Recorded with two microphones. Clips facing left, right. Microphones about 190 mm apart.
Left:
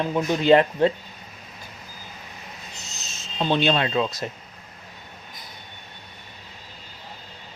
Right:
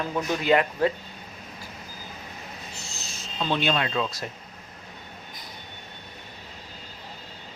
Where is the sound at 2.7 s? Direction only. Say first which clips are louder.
Right 1 dB; 20° left (ahead or behind).